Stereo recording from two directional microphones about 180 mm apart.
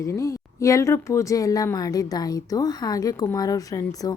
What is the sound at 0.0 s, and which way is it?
Speech, 15° left (ahead or behind).